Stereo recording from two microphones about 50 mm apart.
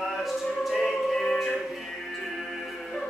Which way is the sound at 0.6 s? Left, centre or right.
Centre.